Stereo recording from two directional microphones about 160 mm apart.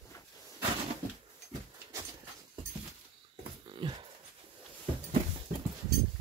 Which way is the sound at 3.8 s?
30° right (ahead or behind).